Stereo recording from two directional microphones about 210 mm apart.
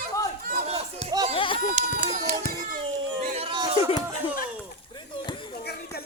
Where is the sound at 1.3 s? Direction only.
25° left (ahead or behind).